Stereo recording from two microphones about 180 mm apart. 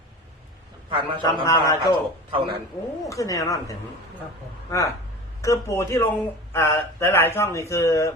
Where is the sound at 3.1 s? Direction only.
20° left (ahead or behind).